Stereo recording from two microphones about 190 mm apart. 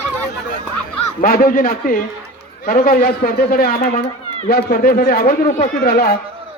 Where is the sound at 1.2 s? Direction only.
50° left (ahead or behind).